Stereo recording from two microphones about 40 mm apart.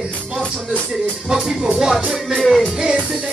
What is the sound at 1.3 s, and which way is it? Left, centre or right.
Speech, centre.